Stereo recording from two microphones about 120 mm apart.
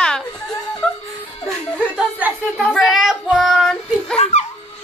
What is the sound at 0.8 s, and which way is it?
Music, 5° left (ahead or behind).